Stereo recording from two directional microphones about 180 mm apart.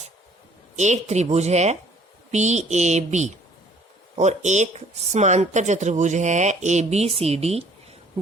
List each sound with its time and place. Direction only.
0.8 s speech: 40° right (ahead or behind)